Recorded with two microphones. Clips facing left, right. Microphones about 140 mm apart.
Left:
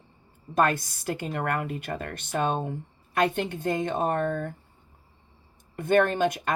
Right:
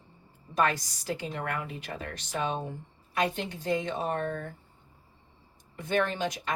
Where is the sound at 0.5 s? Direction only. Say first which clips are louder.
Left 4 dB; 55° left (ahead or behind).